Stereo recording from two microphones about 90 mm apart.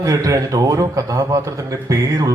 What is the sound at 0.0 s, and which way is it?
A man's voice, 40° right (ahead or behind).